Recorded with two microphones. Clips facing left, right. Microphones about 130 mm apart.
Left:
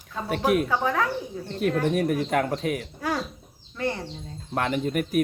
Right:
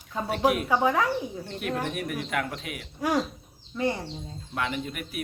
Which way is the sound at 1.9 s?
40° left (ahead or behind).